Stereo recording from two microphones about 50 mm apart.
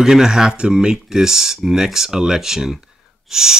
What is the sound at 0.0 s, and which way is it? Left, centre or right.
Speech, centre.